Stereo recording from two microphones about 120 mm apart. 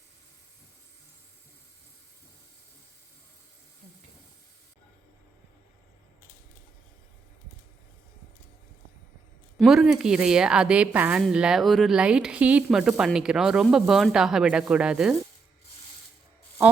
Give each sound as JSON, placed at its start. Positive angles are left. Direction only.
{"t": 9.6, "sound": "speech", "side_deg": -5}